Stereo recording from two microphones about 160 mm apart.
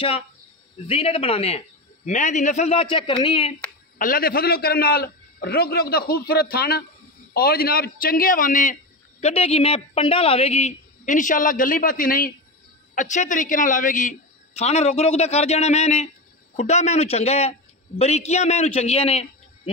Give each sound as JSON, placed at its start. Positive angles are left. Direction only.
{"t": 0.8, "sound": "a man's voice", "side_deg": 35}
{"t": 2.0, "sound": "a man's voice", "side_deg": 50}
{"t": 4.0, "sound": "a man's voice", "side_deg": 65}
{"t": 9.2, "sound": "a man's voice", "side_deg": 40}